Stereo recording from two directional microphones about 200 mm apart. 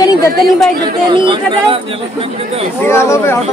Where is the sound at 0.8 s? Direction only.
25° right (ahead or behind).